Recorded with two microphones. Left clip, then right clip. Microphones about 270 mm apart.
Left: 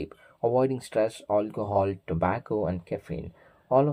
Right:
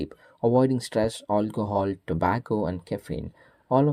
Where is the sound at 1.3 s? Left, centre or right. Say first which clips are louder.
Even; right.